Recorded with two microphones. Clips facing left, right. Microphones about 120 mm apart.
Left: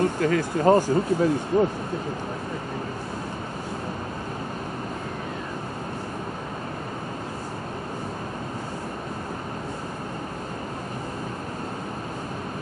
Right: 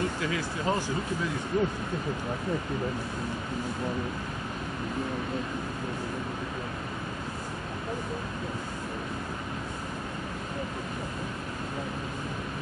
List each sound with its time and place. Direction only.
0.0 s speech: 50° left (ahead or behind)